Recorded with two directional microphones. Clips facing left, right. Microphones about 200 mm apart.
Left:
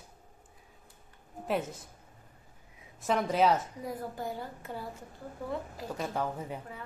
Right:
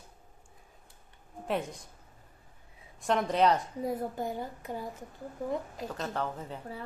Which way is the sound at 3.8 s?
25° right (ahead or behind).